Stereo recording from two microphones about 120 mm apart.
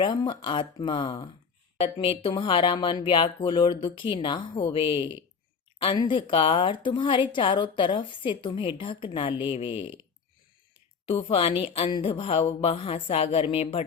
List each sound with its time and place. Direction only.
0.0 s a woman's voice: 40° left (ahead or behind)
1.8 s a woman's voice: 55° left (ahead or behind)
2.3 s a woman's voice: 45° left (ahead or behind)
11.0 s a woman's voice: 50° left (ahead or behind)
11.9 s a woman's voice: 45° left (ahead or behind)